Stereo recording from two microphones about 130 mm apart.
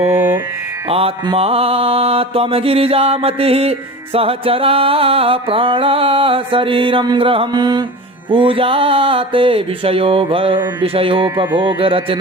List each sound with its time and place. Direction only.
0.0 s mantra: 15° right (ahead or behind)
0.9 s mantra: 50° right (ahead or behind)